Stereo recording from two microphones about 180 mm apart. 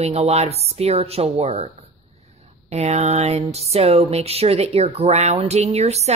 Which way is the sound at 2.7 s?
35° right (ahead or behind).